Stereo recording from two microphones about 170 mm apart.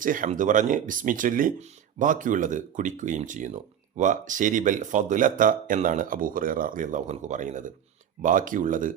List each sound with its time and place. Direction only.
0.0 s speech: 50° right (ahead or behind)